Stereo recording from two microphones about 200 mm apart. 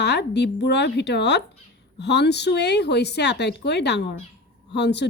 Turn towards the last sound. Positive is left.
turn(degrees=60)  # may be behind; listen again after turning